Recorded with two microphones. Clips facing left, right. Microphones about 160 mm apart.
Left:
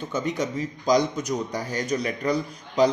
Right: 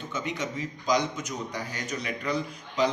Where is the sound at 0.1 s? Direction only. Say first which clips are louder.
Left 6 dB; 40° left (ahead or behind).